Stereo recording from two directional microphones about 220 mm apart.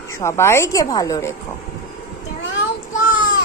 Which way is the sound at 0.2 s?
10° left (ahead or behind).